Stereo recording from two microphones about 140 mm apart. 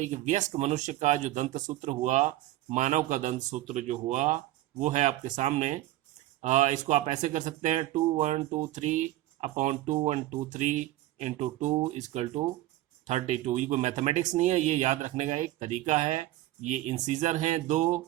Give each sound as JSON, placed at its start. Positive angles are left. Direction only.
{"t": 0.0, "sound": "speech", "side_deg": -60}